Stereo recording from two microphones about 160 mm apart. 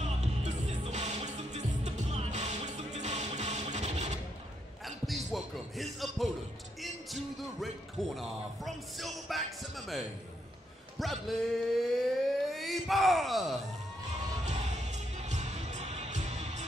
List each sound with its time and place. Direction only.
0.0 s music: 45° right (ahead or behind)
4.8 s a sound: centre (ahead or behind)
6.8 s music: centre (ahead or behind)
8.2 s speech: centre (ahead or behind)
11.0 s a sound: centre (ahead or behind)
14.4 s music: 45° right (ahead or behind)